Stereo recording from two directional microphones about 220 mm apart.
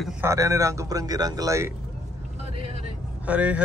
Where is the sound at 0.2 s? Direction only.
15° right (ahead or behind).